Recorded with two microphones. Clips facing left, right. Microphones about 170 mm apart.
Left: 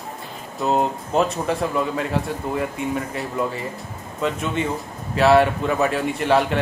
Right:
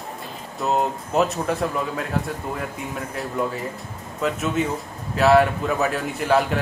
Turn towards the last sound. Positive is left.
turn(degrees=0)  # may be behind; listen again after turning